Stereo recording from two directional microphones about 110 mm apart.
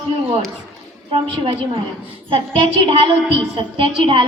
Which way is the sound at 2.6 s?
50° right (ahead or behind).